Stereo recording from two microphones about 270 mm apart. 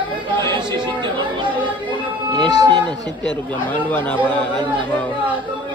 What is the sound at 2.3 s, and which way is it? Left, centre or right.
Speech, centre.